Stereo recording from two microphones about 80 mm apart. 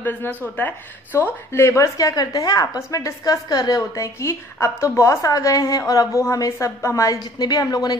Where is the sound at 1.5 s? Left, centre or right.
Left.